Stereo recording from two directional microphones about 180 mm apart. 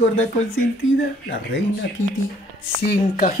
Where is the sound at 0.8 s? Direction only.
90° left.